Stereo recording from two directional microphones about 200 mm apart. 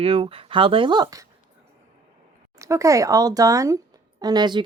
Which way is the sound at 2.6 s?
15° right (ahead or behind).